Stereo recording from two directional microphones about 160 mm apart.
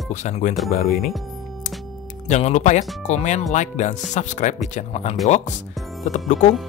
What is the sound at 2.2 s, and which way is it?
Speech, 45° left (ahead or behind).